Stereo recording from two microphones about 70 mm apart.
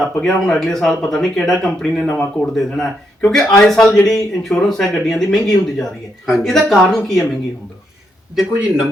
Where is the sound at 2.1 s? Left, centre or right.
Left.